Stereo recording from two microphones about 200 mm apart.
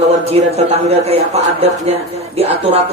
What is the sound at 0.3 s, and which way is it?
A woman's voice, 30° right (ahead or behind).